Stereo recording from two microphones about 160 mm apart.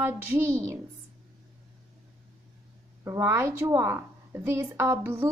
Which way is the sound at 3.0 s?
20° right (ahead or behind).